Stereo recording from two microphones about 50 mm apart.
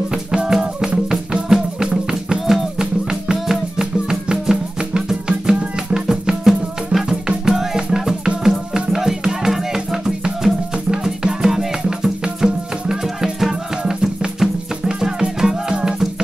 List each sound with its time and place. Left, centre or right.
0.1 s music: centre
5.9 s music: centre